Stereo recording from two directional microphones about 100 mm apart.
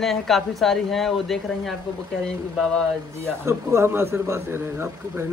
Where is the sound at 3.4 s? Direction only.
25° right (ahead or behind).